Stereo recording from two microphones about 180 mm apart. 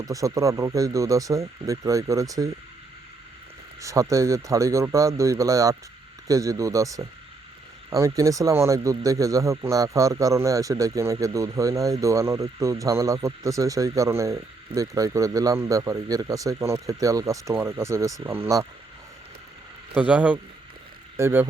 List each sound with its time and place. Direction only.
0.0 s speech: 20° right (ahead or behind)
3.8 s speech: 15° right (ahead or behind)
19.9 s speech: 10° right (ahead or behind)